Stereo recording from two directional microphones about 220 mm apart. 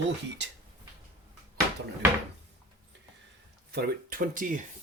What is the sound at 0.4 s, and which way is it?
Speech, 55° right (ahead or behind).